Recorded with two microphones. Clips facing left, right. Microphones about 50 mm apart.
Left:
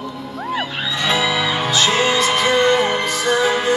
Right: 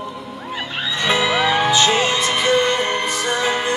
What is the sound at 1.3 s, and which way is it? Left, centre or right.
Music, right.